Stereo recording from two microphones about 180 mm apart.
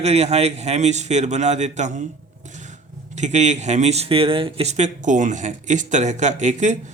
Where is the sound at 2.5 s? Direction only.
40° right (ahead or behind).